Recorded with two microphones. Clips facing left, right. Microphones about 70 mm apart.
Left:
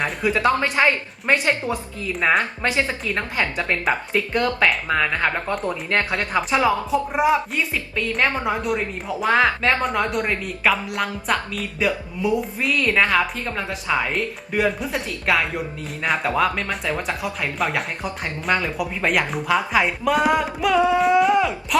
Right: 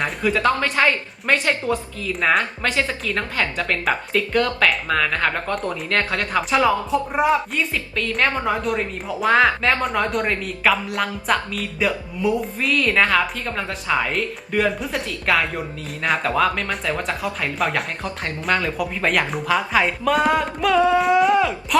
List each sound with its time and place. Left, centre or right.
0.0 s a woman's voice: centre
0.3 s a woman's voice: centre
6.5 s a woman's voice: centre